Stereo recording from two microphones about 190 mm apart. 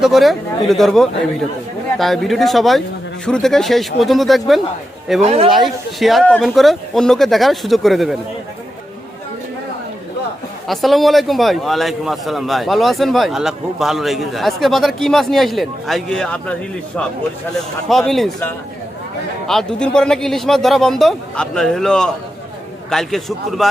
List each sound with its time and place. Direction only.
0.0 s a man's voice: centre (ahead or behind)
5.2 s speech: 35° right (ahead or behind)
5.5 s a man's voice: centre (ahead or behind)
10.7 s a man's voice: centre (ahead or behind)
17.8 s a man's voice: centre (ahead or behind)
19.5 s a man's voice: 5° left (ahead or behind)